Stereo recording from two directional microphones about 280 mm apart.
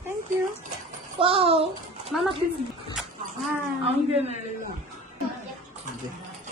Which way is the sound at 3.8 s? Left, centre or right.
Right.